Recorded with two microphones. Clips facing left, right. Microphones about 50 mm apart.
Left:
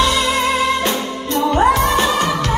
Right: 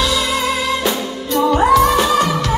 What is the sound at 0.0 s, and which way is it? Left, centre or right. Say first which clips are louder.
Music: left 2 dB; left.